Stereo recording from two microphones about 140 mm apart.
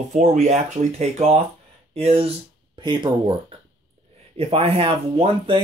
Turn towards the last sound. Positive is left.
turn(degrees=-35)  # may be behind; listen again after turning